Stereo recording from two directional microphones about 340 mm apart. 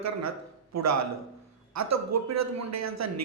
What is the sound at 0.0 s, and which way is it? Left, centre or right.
A man's voice, right.